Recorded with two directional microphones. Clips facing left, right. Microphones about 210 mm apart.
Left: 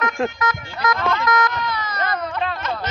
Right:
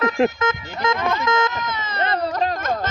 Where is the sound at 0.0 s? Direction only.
25° right (ahead or behind).